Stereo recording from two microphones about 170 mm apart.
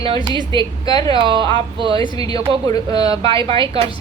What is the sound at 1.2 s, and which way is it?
Speech, 30° right (ahead or behind).